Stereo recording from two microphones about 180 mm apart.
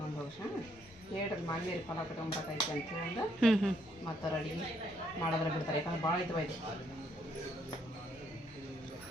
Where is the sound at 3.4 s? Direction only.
Centre (ahead or behind).